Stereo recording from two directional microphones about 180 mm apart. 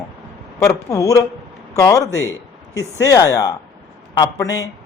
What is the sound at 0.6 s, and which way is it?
Speech, 15° left (ahead or behind).